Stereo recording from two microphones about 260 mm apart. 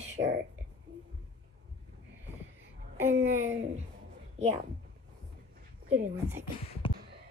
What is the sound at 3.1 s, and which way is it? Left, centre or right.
Speech, right.